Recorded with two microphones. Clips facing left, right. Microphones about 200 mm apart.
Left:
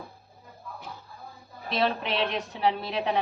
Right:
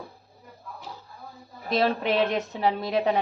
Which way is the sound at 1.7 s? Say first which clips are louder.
Right 4 dB; 45° right (ahead or behind).